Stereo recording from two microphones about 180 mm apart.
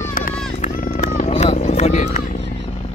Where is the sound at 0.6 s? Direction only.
45° left (ahead or behind).